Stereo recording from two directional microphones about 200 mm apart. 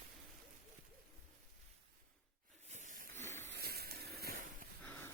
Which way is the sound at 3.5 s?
50° right (ahead or behind).